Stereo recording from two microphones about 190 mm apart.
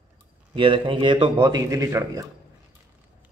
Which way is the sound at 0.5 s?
25° right (ahead or behind).